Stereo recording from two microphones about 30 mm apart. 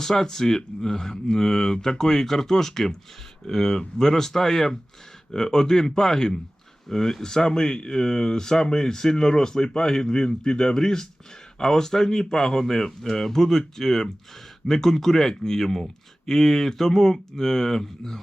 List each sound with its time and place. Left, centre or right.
0.0 s speech: centre